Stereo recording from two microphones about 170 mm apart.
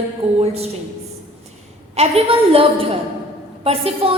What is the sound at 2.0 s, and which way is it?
A woman's voice, 35° right (ahead or behind).